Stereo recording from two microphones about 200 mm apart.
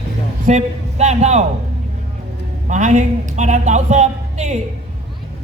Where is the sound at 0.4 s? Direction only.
35° right (ahead or behind).